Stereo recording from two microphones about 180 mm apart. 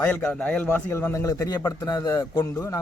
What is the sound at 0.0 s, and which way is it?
A man's voice, 5° left (ahead or behind).